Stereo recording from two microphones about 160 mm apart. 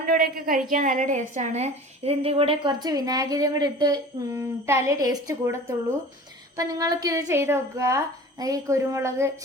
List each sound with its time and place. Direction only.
0.0 s a woman's voice: 70° right (ahead or behind); by 9.3 s 15° right (ahead or behind)